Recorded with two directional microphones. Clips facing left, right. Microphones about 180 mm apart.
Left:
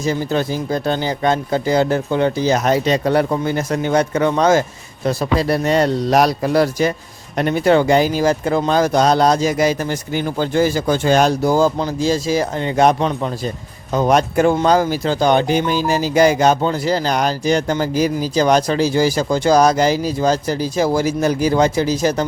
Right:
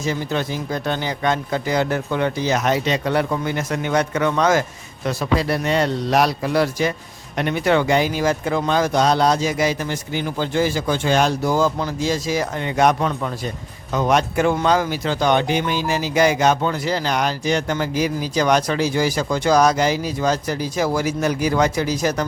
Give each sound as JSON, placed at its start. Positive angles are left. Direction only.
{"t": 0.0, "sound": "speech", "side_deg": 35}
{"t": 13.9, "sound": "speech", "side_deg": 35}